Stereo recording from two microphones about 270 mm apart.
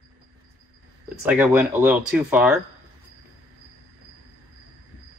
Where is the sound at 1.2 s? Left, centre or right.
Centre.